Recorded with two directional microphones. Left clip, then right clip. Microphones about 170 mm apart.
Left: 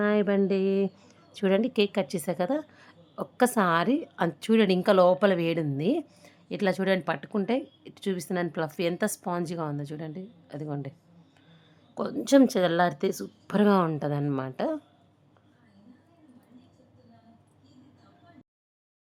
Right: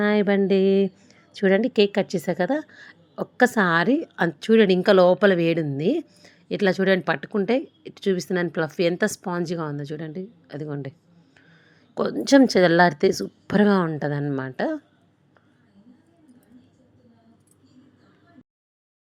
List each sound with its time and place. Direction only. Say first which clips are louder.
0.0 s a woman's voice: right 4 dB; 20° right (ahead or behind)
12.0 s a woman's voice: right 4 dB; 20° right (ahead or behind)